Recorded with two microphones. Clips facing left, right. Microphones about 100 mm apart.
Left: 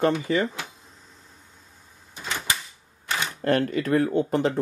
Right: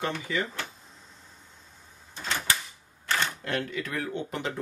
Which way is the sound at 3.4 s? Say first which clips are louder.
Left 9 dB; 45° left (ahead or behind).